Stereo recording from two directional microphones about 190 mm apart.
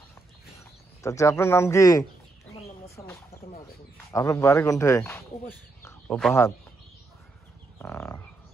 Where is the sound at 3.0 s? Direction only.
15° left (ahead or behind).